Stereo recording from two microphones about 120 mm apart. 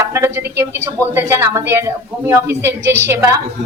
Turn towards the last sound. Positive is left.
turn(degrees=-25)  # may be behind; listen again after turning